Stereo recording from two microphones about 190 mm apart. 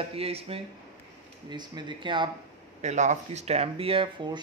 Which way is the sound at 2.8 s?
40° right (ahead or behind).